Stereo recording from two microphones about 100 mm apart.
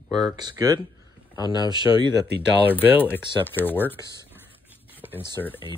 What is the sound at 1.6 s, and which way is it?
Speech, 45° right (ahead or behind).